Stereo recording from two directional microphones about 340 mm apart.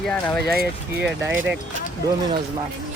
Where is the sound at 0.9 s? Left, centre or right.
Centre.